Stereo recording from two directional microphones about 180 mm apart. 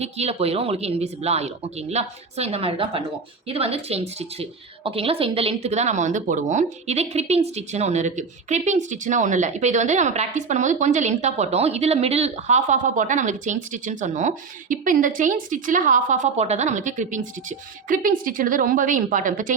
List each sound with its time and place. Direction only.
0.0 s a woman's voice: 35° right (ahead or behind)